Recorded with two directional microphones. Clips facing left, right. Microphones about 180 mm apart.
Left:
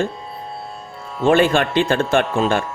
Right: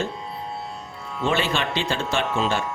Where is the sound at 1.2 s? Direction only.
50° left (ahead or behind).